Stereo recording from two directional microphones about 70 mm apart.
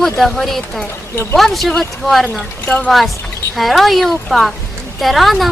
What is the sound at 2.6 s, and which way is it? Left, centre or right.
Speech, centre.